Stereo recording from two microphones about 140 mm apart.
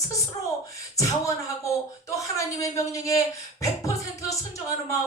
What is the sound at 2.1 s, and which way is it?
Speech, 25° left (ahead or behind).